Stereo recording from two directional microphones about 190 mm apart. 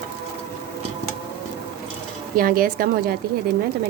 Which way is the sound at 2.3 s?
50° right (ahead or behind).